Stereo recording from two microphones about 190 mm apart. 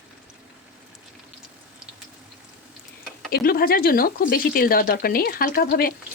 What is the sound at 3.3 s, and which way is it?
Speech, 50° left (ahead or behind).